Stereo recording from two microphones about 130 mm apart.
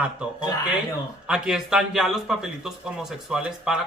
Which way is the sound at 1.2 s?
5° right (ahead or behind).